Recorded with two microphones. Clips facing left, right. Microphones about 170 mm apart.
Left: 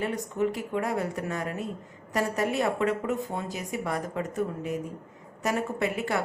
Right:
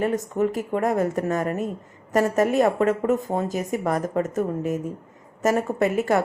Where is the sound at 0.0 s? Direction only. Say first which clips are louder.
Right 5 dB; 45° right (ahead or behind).